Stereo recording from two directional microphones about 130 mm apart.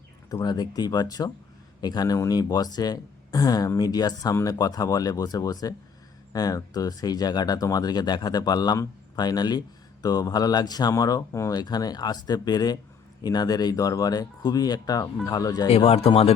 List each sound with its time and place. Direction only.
0.3 s speech: 30° left (ahead or behind)
15.7 s speech: 50° left (ahead or behind)